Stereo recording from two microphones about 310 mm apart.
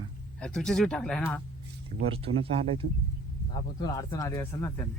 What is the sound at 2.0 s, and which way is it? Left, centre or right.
Speech, centre.